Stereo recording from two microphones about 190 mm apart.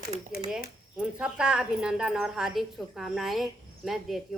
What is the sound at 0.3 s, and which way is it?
Speech, 50° left (ahead or behind).